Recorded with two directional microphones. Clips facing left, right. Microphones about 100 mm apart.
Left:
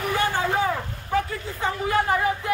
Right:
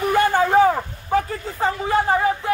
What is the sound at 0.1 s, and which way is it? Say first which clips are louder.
Vehicle: right 8 dB; 45° right (ahead or behind).